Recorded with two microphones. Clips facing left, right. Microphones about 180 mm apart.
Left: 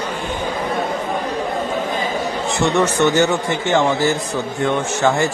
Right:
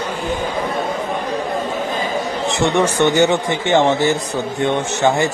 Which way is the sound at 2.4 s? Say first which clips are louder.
Right 1 dB; 15° right (ahead or behind).